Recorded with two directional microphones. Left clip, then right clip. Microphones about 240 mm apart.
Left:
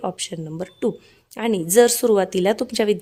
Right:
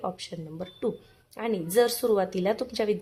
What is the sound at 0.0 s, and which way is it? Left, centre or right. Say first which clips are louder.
Speech: left 7 dB; left.